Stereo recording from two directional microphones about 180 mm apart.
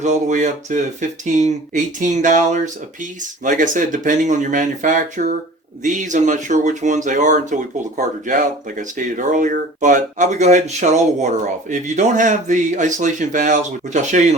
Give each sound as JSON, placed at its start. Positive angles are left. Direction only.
{"t": 0.0, "sound": "speech", "side_deg": -40}